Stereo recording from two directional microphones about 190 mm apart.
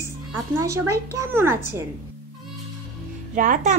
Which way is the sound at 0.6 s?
15° right (ahead or behind).